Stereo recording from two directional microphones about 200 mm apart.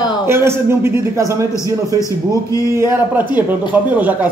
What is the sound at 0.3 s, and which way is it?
A man's voice, 10° right (ahead or behind).